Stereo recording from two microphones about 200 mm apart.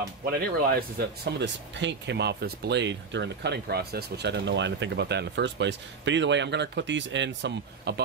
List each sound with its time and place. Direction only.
0.3 s speech: 50° right (ahead or behind)